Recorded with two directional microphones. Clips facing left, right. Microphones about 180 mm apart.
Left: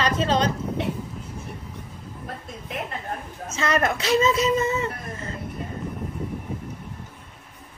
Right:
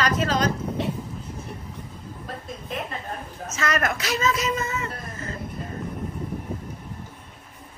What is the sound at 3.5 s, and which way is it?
Speech, 30° left (ahead or behind).